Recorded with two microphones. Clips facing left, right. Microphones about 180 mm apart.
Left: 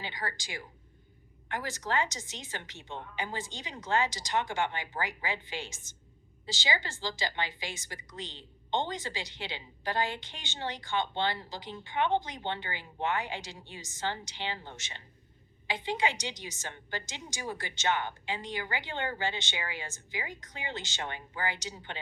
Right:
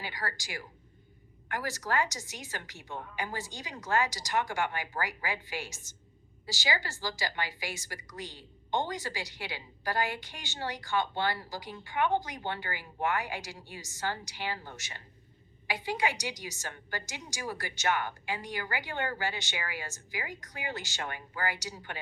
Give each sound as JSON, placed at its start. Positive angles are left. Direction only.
{"t": 0.0, "sound": "a woman's voice", "side_deg": 20}